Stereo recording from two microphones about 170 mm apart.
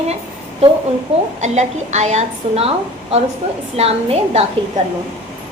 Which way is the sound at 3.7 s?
35° right (ahead or behind).